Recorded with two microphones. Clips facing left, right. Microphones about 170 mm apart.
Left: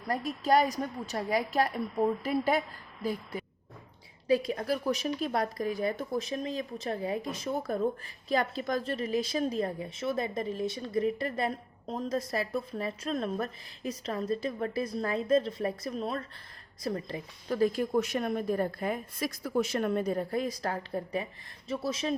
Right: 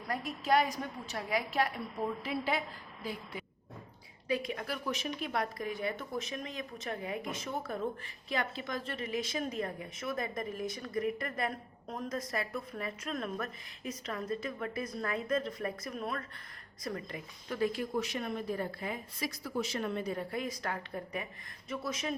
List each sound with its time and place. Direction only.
0.1 s a woman's voice: 40° left (ahead or behind)